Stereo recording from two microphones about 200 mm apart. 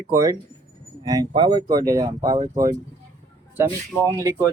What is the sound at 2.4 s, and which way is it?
Speech, 40° right (ahead or behind).